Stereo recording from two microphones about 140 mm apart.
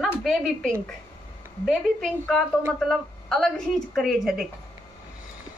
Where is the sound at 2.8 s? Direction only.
5° left (ahead or behind).